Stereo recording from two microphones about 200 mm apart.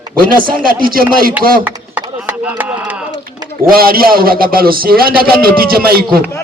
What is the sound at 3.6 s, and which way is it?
A man's voice, 45° right (ahead or behind).